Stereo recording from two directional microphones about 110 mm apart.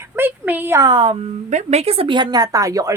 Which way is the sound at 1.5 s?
80° right.